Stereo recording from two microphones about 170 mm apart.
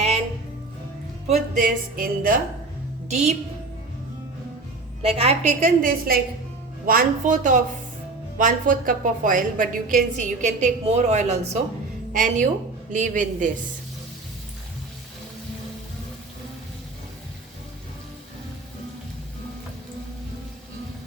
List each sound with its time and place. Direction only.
1.3 s a woman's voice: 50° right (ahead or behind)
3.1 s a woman's voice: 40° right (ahead or behind)
5.0 s a woman's voice: 35° right (ahead or behind); by 13.5 s 50° right (ahead or behind)